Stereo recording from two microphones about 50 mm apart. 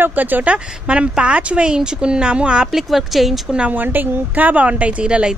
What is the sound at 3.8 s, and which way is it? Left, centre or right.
Speech, right.